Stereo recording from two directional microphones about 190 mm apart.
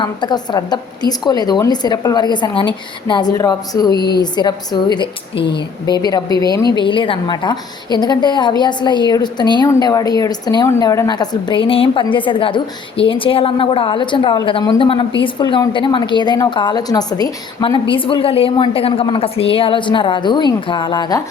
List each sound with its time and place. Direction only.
0.0 s a woman's voice: 25° left (ahead or behind)